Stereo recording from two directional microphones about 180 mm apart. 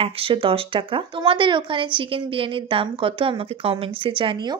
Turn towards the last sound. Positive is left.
turn(degrees=-30)  # may be behind; listen again after turning